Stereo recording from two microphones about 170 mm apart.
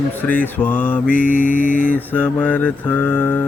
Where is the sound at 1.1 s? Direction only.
55° left (ahead or behind).